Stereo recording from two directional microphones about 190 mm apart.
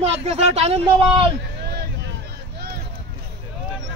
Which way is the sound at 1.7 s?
60° right (ahead or behind).